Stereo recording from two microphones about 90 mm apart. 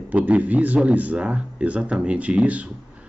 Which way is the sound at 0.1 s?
15° right (ahead or behind).